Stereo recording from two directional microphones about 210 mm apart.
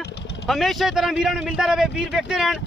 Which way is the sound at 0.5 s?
Centre (ahead or behind).